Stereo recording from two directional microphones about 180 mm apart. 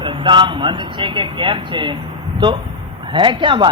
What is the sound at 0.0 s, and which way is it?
Speech, 25° right (ahead or behind).